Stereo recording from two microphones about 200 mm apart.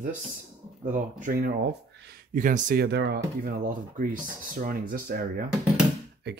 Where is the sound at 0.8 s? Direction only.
40° right (ahead or behind).